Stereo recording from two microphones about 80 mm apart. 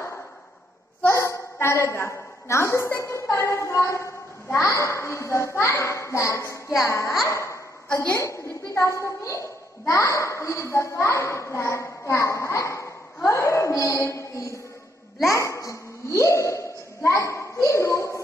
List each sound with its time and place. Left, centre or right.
1.0 s a woman's voice: left
7.2 s a sound: left
8.2 s a child's voice: left